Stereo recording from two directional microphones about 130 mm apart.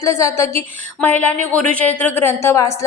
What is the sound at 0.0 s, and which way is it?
A woman's voice, 20° left (ahead or behind).